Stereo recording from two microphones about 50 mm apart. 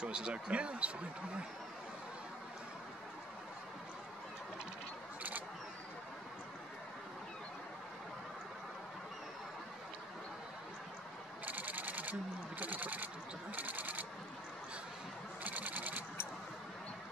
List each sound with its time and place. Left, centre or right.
0.0 s speech: centre
11.4 s a sound: right
15.4 s sewing machine: right